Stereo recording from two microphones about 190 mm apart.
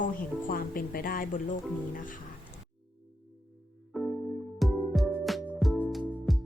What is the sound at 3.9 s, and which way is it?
Music, centre (ahead or behind).